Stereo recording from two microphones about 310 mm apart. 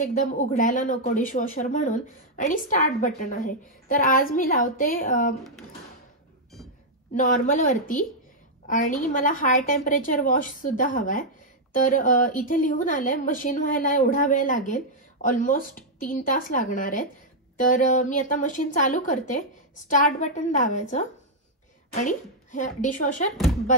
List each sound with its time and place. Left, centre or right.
0.0 s a woman's voice: left
7.2 s a woman's voice: left